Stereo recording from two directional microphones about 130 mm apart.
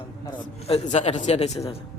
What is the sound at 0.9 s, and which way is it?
Speech, 60° left (ahead or behind).